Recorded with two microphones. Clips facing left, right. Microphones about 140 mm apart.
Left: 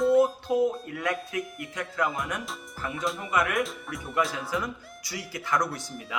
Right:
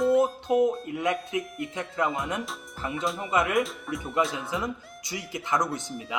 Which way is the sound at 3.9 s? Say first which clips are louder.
Right 4 dB; centre (ahead or behind).